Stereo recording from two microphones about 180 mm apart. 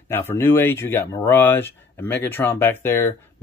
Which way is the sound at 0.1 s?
10° left (ahead or behind).